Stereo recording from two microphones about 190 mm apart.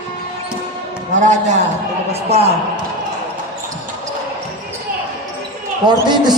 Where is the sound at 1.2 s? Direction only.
40° right (ahead or behind).